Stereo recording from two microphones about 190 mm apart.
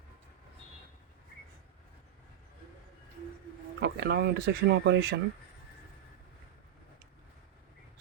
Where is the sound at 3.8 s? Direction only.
60° right (ahead or behind).